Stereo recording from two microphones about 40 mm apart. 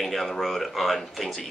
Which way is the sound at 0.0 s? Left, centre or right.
Centre.